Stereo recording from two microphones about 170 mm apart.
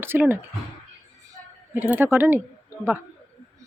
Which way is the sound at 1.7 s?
10° right (ahead or behind).